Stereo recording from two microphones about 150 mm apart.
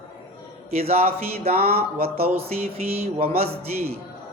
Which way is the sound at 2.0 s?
45° right (ahead or behind).